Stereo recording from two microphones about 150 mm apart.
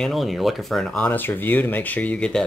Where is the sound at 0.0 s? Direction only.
Centre (ahead or behind).